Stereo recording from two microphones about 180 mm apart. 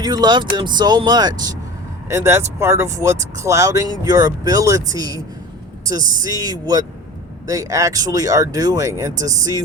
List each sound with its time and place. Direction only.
0.0 s speech: 25° right (ahead or behind)
6.2 s speech: 20° right (ahead or behind)